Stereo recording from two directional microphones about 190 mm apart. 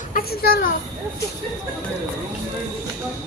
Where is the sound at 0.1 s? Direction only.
50° left (ahead or behind).